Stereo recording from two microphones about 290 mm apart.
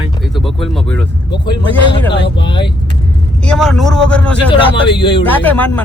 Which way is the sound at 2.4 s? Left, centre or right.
Centre.